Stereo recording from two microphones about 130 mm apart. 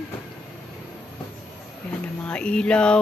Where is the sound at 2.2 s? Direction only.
10° left (ahead or behind).